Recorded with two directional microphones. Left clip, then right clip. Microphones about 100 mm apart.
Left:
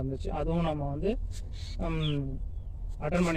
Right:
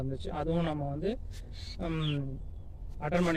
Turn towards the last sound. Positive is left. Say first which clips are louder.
# left 1 dB
turn(degrees=-40)  # may be behind; listen again after turning